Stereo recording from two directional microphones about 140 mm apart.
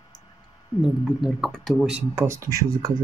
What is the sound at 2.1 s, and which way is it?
Speech, 20° right (ahead or behind).